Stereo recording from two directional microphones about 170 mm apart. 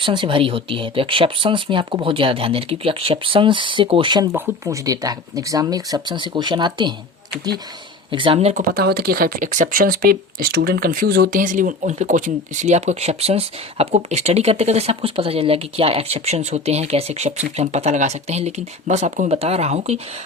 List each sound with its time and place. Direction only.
0.0 s speech: 30° right (ahead or behind)
4.3 s speech: 15° right (ahead or behind)
8.1 s speech: 30° right (ahead or behind)
8.7 s speech: 65° right (ahead or behind); by 20.0 s 40° right (ahead or behind)